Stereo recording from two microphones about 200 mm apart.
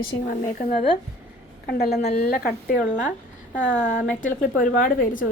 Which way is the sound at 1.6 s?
55° left (ahead or behind).